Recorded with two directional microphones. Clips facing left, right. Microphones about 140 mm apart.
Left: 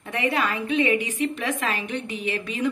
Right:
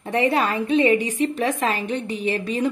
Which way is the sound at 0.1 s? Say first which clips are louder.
Right 5 dB; 30° right (ahead or behind).